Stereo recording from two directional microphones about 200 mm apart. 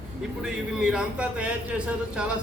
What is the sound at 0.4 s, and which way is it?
A man's voice, 5° right (ahead or behind).